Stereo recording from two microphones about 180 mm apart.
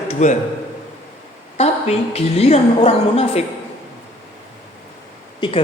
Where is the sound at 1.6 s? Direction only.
35° left (ahead or behind).